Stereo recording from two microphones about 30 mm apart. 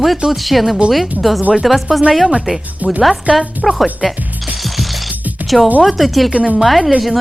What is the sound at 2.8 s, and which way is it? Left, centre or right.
Speech, right.